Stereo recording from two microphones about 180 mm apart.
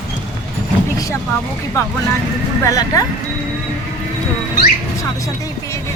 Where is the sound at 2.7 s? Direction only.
20° left (ahead or behind).